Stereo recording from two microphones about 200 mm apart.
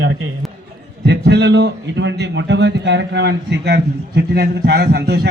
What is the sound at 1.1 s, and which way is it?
A man's voice, 55° right (ahead or behind).